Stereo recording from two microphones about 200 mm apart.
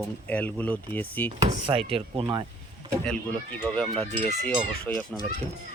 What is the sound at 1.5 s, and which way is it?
Speech, 25° right (ahead or behind).